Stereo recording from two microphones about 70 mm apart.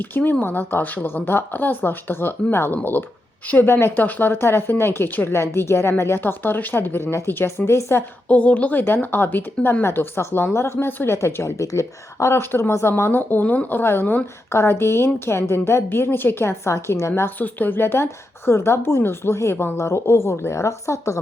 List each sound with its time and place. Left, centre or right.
0.0 s speech: left
8.3 s speech: centre
8.8 s speech: left
17.2 s speech: left